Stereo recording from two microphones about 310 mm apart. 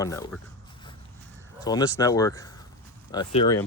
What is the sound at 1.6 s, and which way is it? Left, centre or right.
Speech, centre.